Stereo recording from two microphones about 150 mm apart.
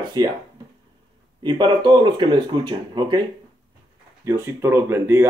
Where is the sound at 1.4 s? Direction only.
30° right (ahead or behind).